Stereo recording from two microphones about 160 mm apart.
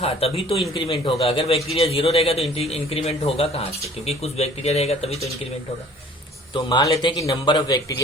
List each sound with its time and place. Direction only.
0.0 s speech: 40° left (ahead or behind)
6.5 s a man's voice: 30° left (ahead or behind)